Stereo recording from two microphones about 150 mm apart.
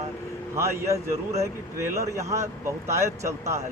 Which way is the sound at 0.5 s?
20° right (ahead or behind).